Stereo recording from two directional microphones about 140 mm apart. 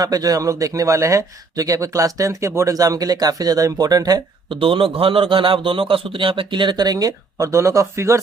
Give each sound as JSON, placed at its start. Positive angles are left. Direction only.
{"t": 0.0, "sound": "speech", "side_deg": -25}
{"t": 4.6, "sound": "a man's voice", "side_deg": -40}